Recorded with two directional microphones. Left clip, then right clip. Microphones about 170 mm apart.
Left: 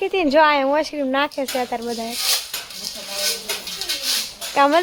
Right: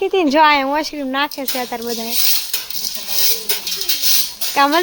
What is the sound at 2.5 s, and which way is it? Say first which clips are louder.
Cutlery: right 5 dB; 65° right (ahead or behind).